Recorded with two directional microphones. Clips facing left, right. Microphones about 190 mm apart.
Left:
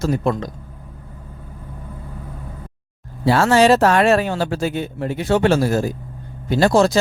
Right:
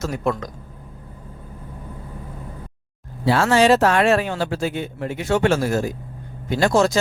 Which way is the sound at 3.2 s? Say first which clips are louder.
Left 2 dB; 40° left (ahead or behind).